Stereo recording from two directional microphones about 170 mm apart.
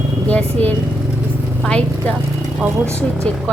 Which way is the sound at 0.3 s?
10° left (ahead or behind).